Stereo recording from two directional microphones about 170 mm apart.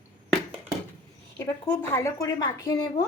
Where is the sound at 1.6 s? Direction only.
15° left (ahead or behind).